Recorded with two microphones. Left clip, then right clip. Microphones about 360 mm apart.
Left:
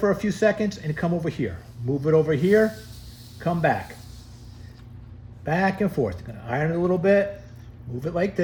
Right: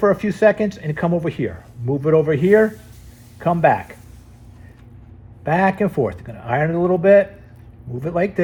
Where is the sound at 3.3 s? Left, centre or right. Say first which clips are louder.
Right 7 dB; centre.